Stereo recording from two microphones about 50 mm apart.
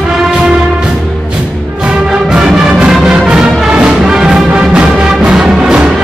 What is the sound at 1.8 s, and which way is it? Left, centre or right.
Music, centre.